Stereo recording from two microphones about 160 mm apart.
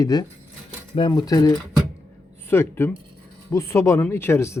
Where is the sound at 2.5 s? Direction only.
15° left (ahead or behind).